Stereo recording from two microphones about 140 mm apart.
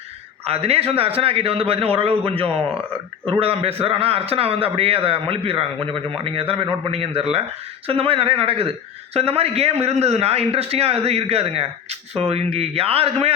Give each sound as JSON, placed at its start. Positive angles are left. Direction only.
{"t": 0.4, "sound": "a man's voice", "side_deg": -45}